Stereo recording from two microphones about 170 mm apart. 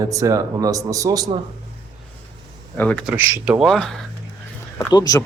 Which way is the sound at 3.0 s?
15° right (ahead or behind).